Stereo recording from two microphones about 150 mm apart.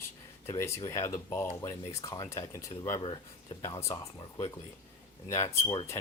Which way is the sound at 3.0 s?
35° left (ahead or behind).